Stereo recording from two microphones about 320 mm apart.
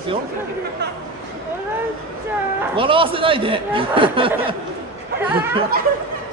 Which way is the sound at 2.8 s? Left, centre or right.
Centre.